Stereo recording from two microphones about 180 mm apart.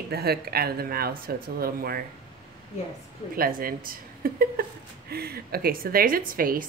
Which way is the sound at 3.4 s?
55° right (ahead or behind).